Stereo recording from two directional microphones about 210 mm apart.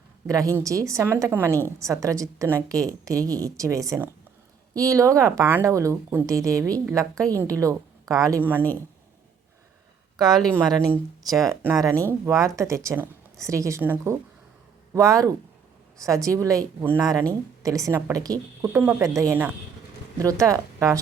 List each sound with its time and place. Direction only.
0.3 s a woman's voice: 15° right (ahead or behind)
10.2 s a woman's voice: 20° right (ahead or behind)